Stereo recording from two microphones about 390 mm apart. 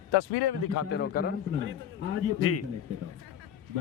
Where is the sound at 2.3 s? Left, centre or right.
Left.